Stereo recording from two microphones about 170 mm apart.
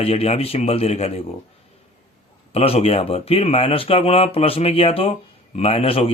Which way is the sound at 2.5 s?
35° left (ahead or behind).